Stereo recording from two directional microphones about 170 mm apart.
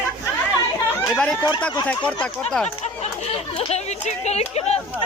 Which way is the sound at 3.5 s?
40° left (ahead or behind).